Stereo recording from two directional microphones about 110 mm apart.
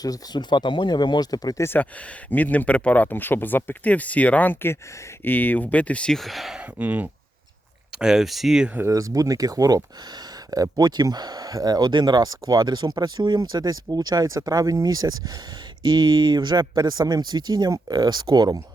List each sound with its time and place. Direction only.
0.0 s speech: 40° left (ahead or behind)
1.6 s speech: 20° left (ahead or behind); by 6.7 s 5° right (ahead or behind)
6.7 s speech: 15° right (ahead or behind)
7.9 s speech: 5° right (ahead or behind)
8.8 s speech: 30° right (ahead or behind)